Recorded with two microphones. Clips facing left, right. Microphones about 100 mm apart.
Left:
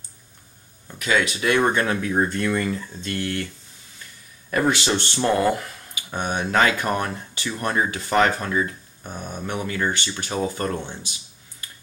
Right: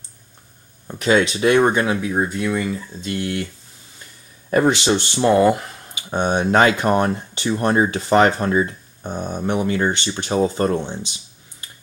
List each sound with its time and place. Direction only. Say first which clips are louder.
0.8 s speech: right 5 dB; 30° right (ahead or behind); by 3.4 s 15° right (ahead or behind)
4.5 s speech: right 5 dB; 25° right (ahead or behind)
5.6 s speech: right 1 dB; 25° right (ahead or behind)